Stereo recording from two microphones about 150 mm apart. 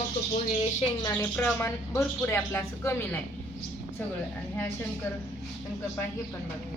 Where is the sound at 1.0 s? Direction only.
15° left (ahead or behind).